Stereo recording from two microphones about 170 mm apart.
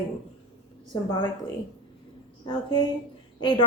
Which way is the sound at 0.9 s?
25° left (ahead or behind).